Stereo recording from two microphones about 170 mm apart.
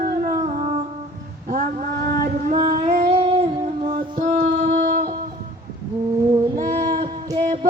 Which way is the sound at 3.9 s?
60° right (ahead or behind).